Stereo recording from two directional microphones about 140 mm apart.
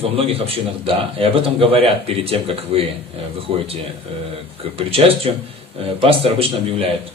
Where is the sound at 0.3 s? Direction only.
45° right (ahead or behind).